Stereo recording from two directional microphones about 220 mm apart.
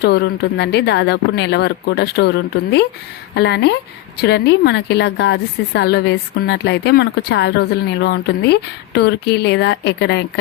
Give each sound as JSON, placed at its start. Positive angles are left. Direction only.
{"t": 0.0, "sound": "speech", "side_deg": 50}